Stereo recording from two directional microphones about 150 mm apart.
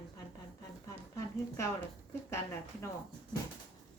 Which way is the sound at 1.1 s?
20° left (ahead or behind).